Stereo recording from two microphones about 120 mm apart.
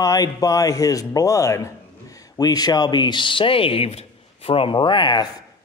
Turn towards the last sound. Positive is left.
turn(degrees=40)  # may be behind; listen again after turning